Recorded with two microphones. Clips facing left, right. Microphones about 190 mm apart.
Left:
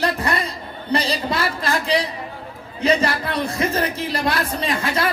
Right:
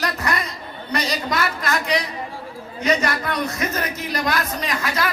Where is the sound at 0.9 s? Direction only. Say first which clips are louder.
Left 1 dB; 30° left (ahead or behind).